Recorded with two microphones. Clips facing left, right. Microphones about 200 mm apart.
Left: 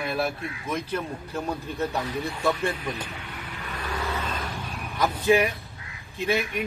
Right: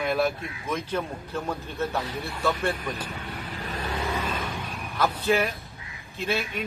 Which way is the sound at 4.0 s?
15° right (ahead or behind).